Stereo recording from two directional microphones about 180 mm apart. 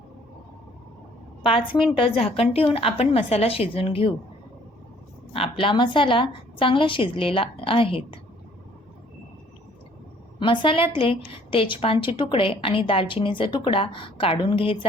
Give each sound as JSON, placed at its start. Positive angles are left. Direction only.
{"t": 1.5, "sound": "a woman's voice", "side_deg": 30}
{"t": 5.3, "sound": "a woman's voice", "side_deg": 30}
{"t": 10.4, "sound": "a woman's voice", "side_deg": 30}